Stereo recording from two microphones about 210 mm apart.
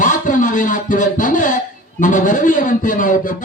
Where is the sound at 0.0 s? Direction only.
40° left (ahead or behind).